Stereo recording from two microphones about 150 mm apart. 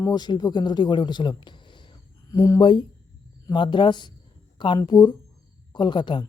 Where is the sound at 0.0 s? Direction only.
25° left (ahead or behind).